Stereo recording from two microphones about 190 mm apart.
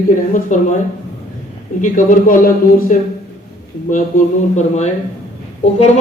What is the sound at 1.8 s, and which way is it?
Speech, 40° left (ahead or behind).